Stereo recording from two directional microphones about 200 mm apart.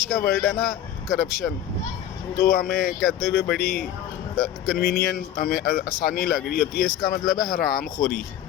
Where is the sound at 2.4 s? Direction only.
45° left (ahead or behind).